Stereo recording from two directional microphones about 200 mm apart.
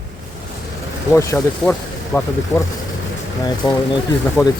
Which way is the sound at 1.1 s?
15° left (ahead or behind).